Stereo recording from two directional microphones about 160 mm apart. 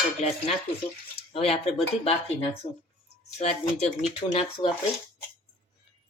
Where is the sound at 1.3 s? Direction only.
40° left (ahead or behind).